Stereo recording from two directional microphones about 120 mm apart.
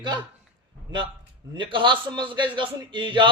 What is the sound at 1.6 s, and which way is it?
A man's voice, 40° right (ahead or behind).